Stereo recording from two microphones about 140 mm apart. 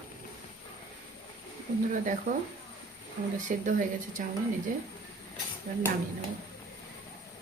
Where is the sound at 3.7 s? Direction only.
70° right (ahead or behind).